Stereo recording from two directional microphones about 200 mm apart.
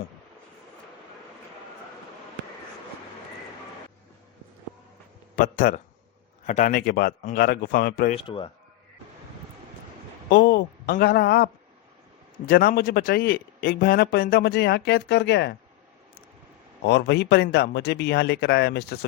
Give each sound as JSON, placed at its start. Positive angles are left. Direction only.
{"t": 5.4, "sound": "a man's voice", "side_deg": 45}
{"t": 8.1, "sound": "speech", "side_deg": 25}
{"t": 10.2, "sound": "a man's voice", "side_deg": 55}
{"t": 12.5, "sound": "a man's voice", "side_deg": 50}
{"t": 16.8, "sound": "speech", "side_deg": 55}